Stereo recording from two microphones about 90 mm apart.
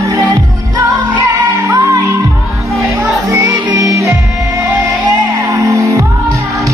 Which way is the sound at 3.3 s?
40° right (ahead or behind).